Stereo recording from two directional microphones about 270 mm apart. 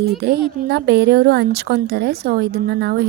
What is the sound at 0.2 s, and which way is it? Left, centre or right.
A woman's voice, right.